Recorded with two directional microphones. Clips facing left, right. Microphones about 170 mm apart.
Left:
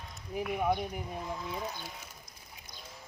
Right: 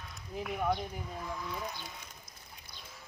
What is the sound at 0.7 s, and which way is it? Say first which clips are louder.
Speech: left 2 dB; 20° left (ahead or behind).